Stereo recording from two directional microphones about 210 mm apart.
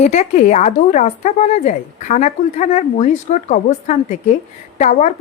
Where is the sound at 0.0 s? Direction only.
35° left (ahead or behind).